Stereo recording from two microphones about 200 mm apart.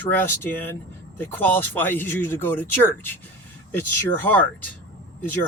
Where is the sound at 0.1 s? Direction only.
10° left (ahead or behind).